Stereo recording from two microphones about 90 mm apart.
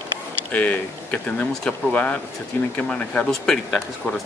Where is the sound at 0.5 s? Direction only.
15° left (ahead or behind).